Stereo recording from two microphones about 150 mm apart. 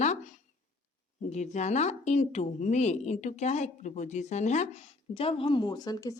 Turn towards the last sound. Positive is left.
turn(degrees=25)  # may be behind; listen again after turning